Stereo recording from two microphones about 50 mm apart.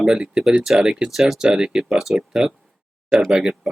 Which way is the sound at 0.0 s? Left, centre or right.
Centre.